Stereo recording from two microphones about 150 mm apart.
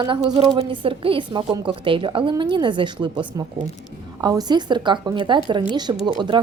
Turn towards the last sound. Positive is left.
turn(degrees=-30)  # may be behind; listen again after turning